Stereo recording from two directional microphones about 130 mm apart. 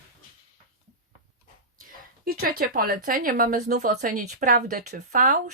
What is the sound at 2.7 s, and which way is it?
A woman's voice, 90° right.